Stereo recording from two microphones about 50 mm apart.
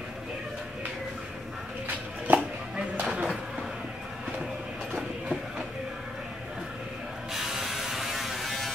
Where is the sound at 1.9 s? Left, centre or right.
Right.